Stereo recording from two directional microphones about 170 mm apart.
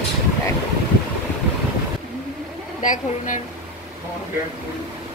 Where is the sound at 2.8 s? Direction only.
50° left (ahead or behind).